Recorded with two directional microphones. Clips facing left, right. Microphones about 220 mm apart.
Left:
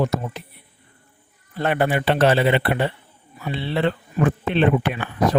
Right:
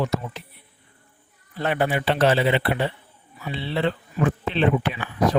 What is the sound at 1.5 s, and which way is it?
Speech, 55° left (ahead or behind).